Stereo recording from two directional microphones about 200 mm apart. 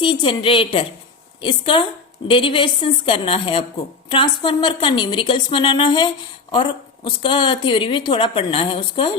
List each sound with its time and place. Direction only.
0.0 s a woman's voice: 25° left (ahead or behind)